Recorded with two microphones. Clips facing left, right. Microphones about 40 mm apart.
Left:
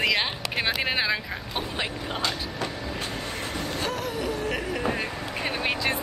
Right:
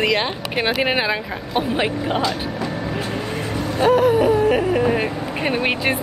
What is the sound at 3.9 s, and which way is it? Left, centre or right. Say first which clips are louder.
Speech: right 19 dB; right.